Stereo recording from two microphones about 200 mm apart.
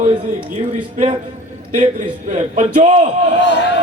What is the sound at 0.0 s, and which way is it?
A man's voice, 35° right (ahead or behind).